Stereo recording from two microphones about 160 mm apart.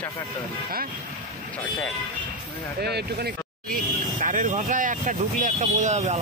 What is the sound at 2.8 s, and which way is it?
Speech, 85° right.